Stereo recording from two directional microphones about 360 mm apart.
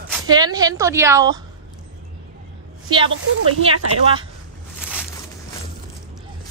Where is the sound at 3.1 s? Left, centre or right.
Right.